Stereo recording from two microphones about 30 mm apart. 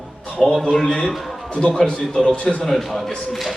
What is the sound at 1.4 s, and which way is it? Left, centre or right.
Music, left.